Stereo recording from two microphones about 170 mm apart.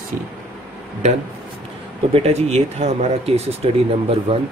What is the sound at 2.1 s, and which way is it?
Speech, 40° right (ahead or behind).